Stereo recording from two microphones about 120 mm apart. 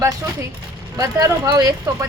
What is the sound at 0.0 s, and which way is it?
Speech, 25° right (ahead or behind).